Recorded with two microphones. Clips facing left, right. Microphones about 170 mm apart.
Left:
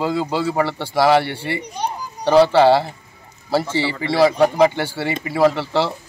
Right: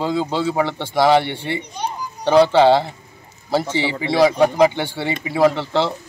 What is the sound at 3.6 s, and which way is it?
Speech, 20° right (ahead or behind).